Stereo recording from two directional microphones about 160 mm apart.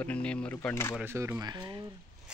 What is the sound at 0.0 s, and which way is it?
Speech, 5° left (ahead or behind).